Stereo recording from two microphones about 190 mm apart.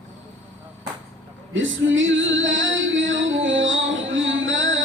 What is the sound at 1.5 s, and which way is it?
Female singing, 85° right.